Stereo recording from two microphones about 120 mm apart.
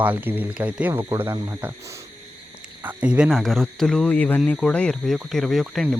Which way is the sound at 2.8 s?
10° right (ahead or behind).